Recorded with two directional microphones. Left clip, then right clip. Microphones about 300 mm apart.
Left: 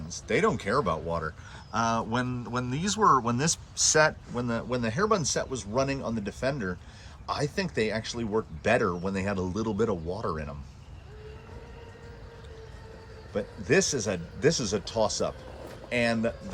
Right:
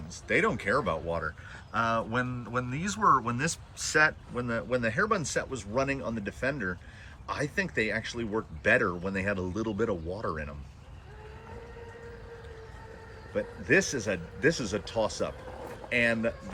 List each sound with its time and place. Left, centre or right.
0.1 s a man's voice: centre
13.3 s a man's voice: centre